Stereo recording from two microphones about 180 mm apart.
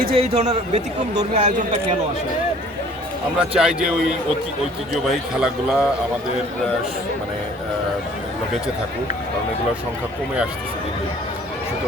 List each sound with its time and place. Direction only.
0.1 s a man's voice: 35° right (ahead or behind)
3.3 s a man's voice: 5° right (ahead or behind)
5.0 s a man's voice: centre (ahead or behind)